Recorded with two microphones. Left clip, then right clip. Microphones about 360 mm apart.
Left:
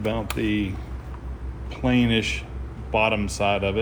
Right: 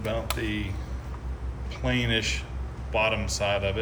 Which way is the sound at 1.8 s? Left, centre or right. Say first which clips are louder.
Left 4 dB; centre.